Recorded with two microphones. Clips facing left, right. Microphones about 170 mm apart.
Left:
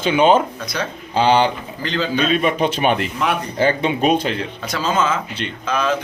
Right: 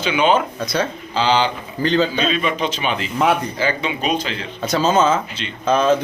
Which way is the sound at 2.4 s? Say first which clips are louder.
Left 3 dB; 50° left (ahead or behind).